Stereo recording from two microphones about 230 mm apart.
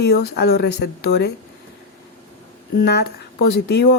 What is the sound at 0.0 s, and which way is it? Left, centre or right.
Speech, left.